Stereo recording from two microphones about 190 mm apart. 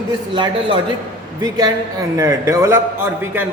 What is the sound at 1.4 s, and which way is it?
A man's voice, 20° right (ahead or behind).